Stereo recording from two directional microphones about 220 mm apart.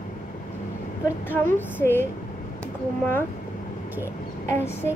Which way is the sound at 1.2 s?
10° left (ahead or behind).